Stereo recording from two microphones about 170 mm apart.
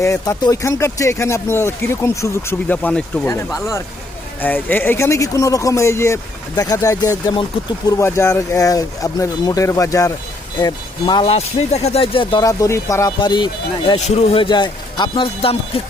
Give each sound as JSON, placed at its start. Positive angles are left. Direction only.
{"t": 0.0, "sound": "speech", "side_deg": 20}
{"t": 14.0, "sound": "a man's voice", "side_deg": 35}